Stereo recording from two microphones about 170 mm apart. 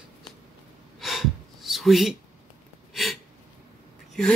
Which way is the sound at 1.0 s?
Centre (ahead or behind).